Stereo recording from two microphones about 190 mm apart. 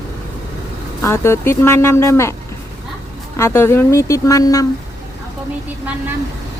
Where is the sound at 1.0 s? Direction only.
15° left (ahead or behind).